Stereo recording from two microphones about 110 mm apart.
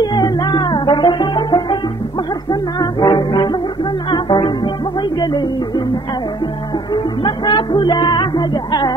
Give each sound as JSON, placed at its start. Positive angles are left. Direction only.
{"t": 0.0, "sound": "music", "side_deg": 40}
{"t": 2.8, "sound": "music", "side_deg": 35}
{"t": 6.9, "sound": "music", "side_deg": 40}